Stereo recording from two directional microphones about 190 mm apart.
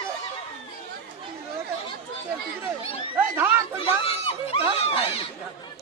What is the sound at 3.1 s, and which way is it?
Chatter, 10° right (ahead or behind).